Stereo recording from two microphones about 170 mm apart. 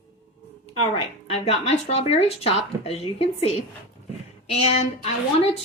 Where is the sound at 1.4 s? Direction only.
35° left (ahead or behind).